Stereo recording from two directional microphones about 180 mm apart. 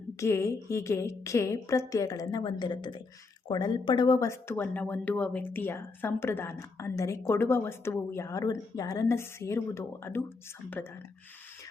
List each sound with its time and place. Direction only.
0.2 s speech: 15° left (ahead or behind)